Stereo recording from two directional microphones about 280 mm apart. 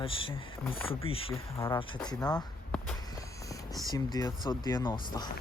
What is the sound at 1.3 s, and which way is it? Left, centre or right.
Speech, centre.